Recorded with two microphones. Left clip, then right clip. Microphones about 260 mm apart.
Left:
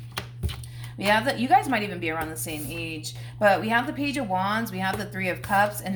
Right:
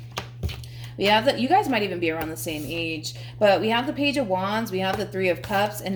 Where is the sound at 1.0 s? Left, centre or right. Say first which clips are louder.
Right 3 dB; left.